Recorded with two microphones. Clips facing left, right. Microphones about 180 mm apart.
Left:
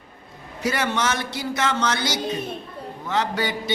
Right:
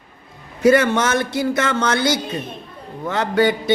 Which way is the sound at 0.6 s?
50° right (ahead or behind).